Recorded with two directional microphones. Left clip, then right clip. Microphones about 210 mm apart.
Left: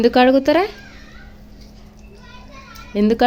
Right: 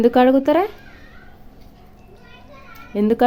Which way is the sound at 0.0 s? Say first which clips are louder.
Left 1 dB; 10° right (ahead or behind).